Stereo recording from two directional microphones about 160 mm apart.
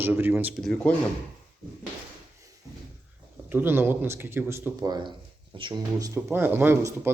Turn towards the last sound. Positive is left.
turn(degrees=-15)  # may be behind; listen again after turning